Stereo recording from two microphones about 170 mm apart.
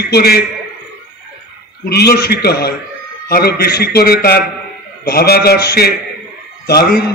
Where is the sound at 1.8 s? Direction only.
70° left (ahead or behind).